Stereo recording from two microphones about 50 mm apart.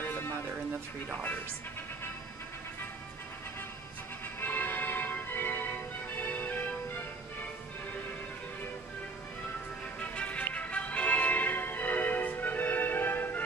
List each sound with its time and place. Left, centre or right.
0.0 s music: left
4.4 s music: left
9.9 s music: left